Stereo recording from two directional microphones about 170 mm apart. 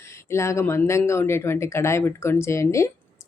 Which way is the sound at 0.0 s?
15° left (ahead or behind).